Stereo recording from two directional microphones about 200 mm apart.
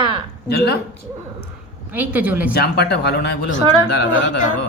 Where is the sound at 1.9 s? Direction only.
10° right (ahead or behind).